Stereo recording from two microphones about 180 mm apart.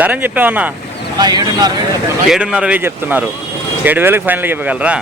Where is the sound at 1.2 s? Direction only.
20° right (ahead or behind).